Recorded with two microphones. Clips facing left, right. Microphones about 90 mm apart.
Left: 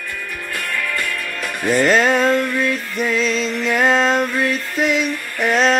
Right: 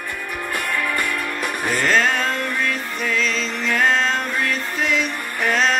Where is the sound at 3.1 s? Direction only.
20° left (ahead or behind).